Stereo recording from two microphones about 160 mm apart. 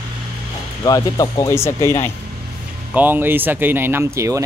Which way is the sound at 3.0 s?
10° right (ahead or behind).